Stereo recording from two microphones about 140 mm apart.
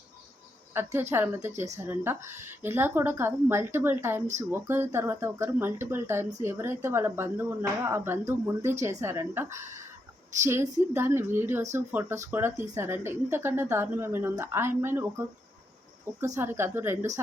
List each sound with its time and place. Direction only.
0.7 s a woman's voice: 15° right (ahead or behind)